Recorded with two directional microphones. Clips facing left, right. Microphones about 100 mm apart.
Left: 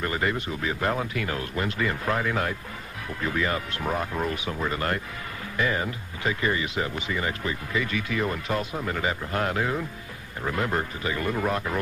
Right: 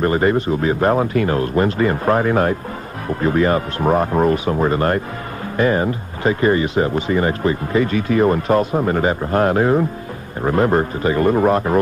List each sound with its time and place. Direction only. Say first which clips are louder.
0.0 s speech: right 11 dB; 40° right (ahead or behind)